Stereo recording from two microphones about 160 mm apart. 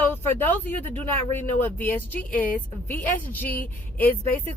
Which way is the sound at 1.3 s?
15° left (ahead or behind).